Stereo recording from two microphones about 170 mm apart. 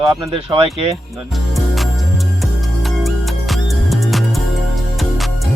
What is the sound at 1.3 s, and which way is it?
Music, centre (ahead or behind).